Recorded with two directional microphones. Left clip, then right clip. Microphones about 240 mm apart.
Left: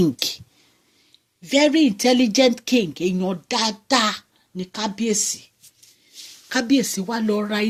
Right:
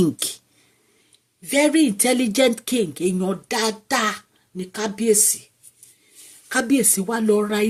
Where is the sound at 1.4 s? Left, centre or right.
Left.